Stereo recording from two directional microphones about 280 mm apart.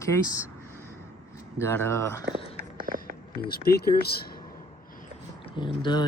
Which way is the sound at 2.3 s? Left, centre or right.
Centre.